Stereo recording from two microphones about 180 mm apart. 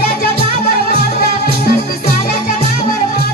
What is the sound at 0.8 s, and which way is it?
Music, 60° left (ahead or behind).